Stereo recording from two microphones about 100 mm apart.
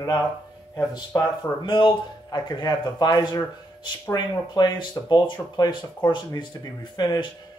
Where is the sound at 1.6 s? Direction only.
50° left (ahead or behind).